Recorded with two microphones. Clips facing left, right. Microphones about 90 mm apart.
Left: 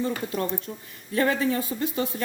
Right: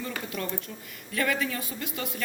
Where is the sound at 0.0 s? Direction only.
30° left (ahead or behind).